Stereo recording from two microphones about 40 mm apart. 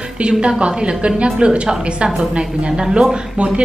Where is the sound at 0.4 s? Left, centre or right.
Right.